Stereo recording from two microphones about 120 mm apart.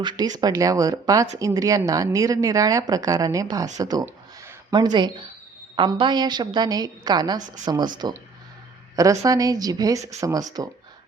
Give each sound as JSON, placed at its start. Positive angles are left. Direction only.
{"t": 0.0, "sound": "a woman's voice", "side_deg": -35}
{"t": 4.0, "sound": "a sound", "side_deg": -20}
{"t": 4.7, "sound": "a woman's voice", "side_deg": -35}
{"t": 9.0, "sound": "a woman's voice", "side_deg": -30}